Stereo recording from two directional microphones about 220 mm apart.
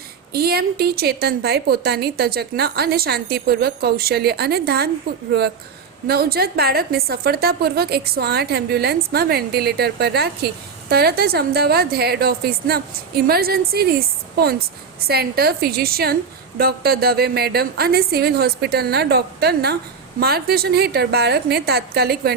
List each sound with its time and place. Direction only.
0.3 s a woman's voice: 45° right (ahead or behind)
6.1 s a woman's voice: 45° right (ahead or behind)
15.0 s a woman's voice: 45° right (ahead or behind)